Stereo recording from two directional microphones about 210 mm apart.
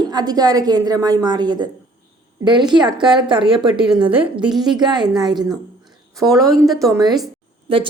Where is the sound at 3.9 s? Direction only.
5° right (ahead or behind).